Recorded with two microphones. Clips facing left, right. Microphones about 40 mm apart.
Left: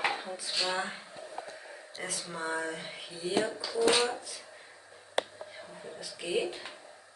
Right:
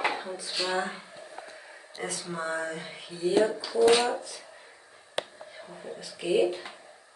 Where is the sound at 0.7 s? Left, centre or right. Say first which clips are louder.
Right 6 dB; centre.